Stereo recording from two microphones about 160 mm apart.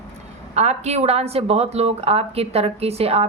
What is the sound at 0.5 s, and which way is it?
A woman's voice, 45° right (ahead or behind).